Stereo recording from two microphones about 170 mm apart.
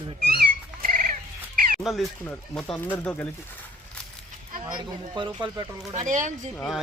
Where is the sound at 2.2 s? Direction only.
10° left (ahead or behind).